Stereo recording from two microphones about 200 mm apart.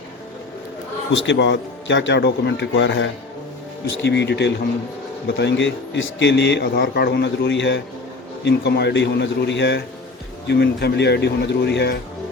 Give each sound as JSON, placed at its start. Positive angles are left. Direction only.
{"t": 1.1, "sound": "a man's voice", "side_deg": 65}